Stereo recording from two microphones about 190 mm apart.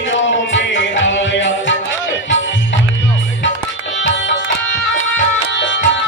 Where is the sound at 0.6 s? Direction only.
80° left.